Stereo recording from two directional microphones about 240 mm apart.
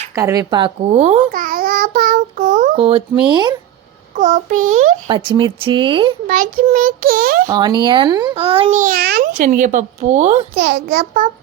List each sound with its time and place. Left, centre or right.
0.2 s a child's voice: centre
4.2 s a child's voice: right
5.0 s a child's voice: centre
6.2 s a child's voice: right
7.4 s a child's voice: centre
10.5 s a child's voice: right